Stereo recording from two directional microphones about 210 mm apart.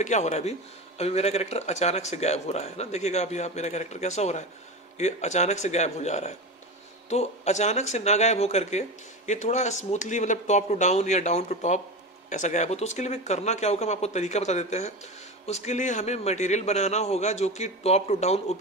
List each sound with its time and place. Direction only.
0.0 s speech: 35° left (ahead or behind)